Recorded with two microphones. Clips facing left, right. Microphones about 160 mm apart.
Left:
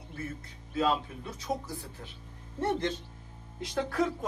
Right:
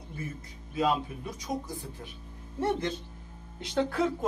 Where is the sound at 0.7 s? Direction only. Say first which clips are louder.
Right 1 dB; 15° right (ahead or behind).